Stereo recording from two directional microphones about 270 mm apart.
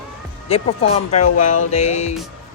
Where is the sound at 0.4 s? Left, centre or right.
Left.